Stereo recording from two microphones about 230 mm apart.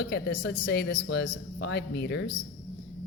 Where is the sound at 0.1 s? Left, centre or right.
Left.